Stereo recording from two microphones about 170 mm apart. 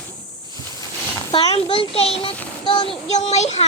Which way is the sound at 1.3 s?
35° left (ahead or behind).